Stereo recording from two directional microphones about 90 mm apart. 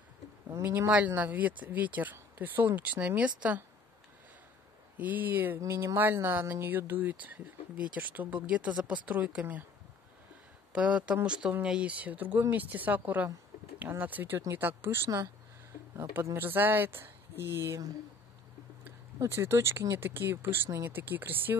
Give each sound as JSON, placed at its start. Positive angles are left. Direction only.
{"t": 0.7, "sound": "speech", "side_deg": -20}
{"t": 4.9, "sound": "speech", "side_deg": -20}
{"t": 5.6, "sound": "speech", "side_deg": -35}
{"t": 10.7, "sound": "speech", "side_deg": -15}
{"t": 16.0, "sound": "speech", "side_deg": -30}
{"t": 19.1, "sound": "speech", "side_deg": -30}